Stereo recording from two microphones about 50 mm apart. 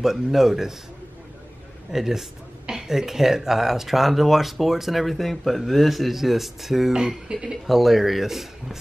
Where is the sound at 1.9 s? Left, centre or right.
Centre.